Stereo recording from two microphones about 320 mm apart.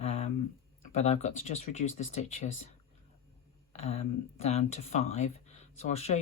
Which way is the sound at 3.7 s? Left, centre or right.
Centre.